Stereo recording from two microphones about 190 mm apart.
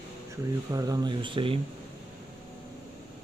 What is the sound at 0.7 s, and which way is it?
Speech, 20° right (ahead or behind).